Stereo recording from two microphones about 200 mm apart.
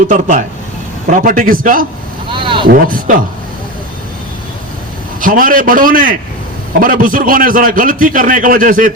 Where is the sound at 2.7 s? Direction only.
45° right (ahead or behind).